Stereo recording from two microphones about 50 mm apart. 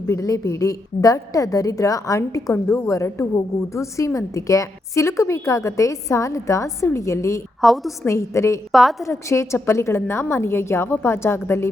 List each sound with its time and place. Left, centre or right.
0.1 s a woman's voice: left
1.8 s a woman's voice: left
7.6 s a woman's voice: centre
8.0 s a woman's voice: left
8.7 s a woman's voice: centre
9.0 s a woman's voice: left